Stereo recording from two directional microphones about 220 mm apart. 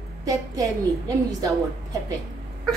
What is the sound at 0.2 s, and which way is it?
A woman's voice, 15° right (ahead or behind).